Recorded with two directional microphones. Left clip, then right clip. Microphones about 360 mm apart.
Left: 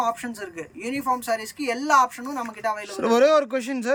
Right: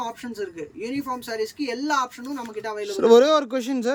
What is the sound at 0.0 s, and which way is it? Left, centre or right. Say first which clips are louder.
Speech: left 4 dB; centre.